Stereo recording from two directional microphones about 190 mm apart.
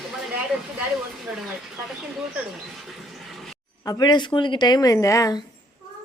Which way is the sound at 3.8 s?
20° left (ahead or behind).